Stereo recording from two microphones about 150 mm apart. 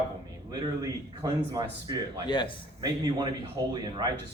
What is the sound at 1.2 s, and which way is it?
Speech, 25° right (ahead or behind).